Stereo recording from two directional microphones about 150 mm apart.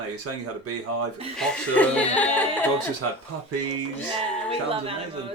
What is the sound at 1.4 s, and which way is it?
Speech, 10° left (ahead or behind).